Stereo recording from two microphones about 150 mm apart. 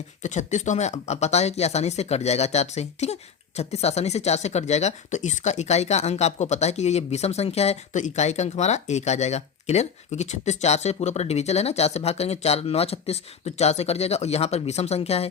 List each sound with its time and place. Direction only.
0.2 s speech: 55° left (ahead or behind)